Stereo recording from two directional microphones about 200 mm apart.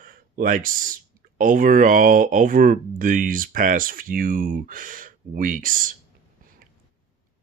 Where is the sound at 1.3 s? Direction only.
45° right (ahead or behind).